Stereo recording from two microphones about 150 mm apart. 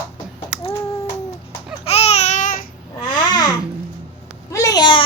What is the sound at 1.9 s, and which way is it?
Babbling, 45° left (ahead or behind).